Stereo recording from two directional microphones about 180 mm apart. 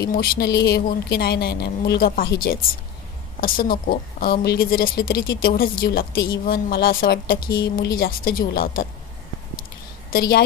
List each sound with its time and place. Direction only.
0.1 s speech: 55° left (ahead or behind)